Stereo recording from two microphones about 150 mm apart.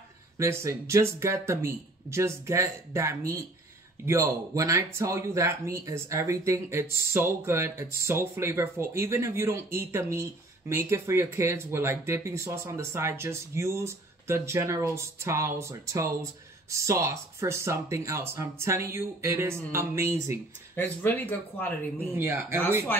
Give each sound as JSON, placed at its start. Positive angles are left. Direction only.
{"t": 0.4, "sound": "speech", "side_deg": -20}
{"t": 20.7, "sound": "speech", "side_deg": 15}
{"t": 22.1, "sound": "speech", "side_deg": -15}
{"t": 22.9, "sound": "speech", "side_deg": 15}